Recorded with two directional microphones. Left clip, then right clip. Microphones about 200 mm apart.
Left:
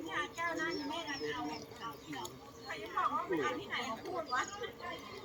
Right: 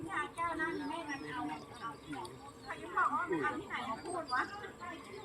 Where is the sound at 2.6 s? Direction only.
20° left (ahead or behind).